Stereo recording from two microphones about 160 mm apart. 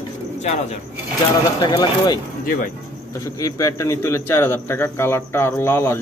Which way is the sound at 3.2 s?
20° left (ahead or behind).